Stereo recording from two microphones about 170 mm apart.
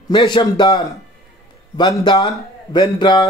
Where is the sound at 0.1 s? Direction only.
25° left (ahead or behind).